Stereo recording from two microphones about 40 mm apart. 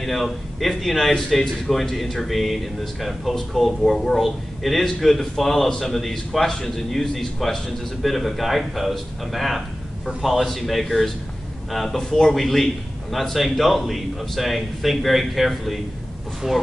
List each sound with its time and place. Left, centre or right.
0.0 s a man's voice: centre